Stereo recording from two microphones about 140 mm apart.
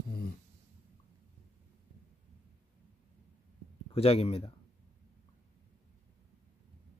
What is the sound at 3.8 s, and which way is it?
Speech, 45° left (ahead or behind).